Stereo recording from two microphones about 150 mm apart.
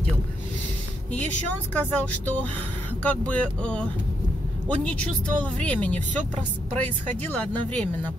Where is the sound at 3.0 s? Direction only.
10° left (ahead or behind).